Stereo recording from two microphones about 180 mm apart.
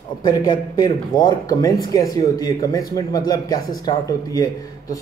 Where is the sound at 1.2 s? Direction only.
20° left (ahead or behind).